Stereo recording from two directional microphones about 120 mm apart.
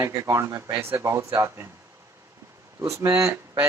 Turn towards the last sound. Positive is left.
turn(degrees=-20)  # may be behind; listen again after turning